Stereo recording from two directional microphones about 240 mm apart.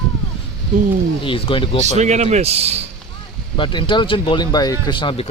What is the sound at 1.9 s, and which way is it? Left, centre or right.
Speech, right.